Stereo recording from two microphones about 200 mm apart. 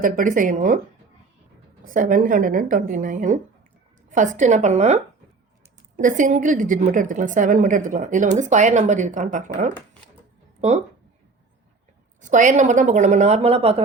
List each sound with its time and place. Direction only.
0.0 s a woman's voice: 40° right (ahead or behind)
1.8 s a woman's voice: 45° right (ahead or behind)
6.0 s a woman's voice: 40° right (ahead or behind)
12.2 s a woman's voice: 40° right (ahead or behind)